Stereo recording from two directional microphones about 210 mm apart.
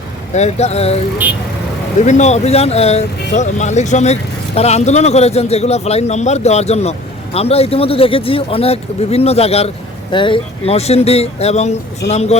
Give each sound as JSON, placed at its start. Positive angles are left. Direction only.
{"t": 0.3, "sound": "speech", "side_deg": 30}
{"t": 2.0, "sound": "speech", "side_deg": 35}